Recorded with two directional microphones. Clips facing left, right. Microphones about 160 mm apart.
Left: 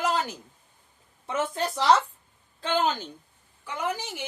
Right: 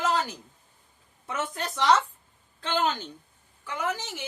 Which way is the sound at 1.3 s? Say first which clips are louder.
Left 4 dB; 30° left (ahead or behind).